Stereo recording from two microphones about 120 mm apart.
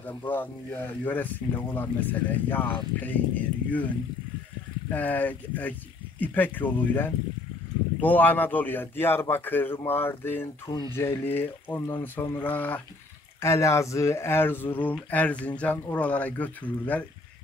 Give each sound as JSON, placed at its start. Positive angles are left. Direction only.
{"t": 0.0, "sound": "speech", "side_deg": 15}